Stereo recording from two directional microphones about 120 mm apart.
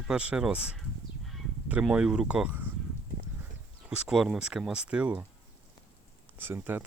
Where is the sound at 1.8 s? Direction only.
5° right (ahead or behind).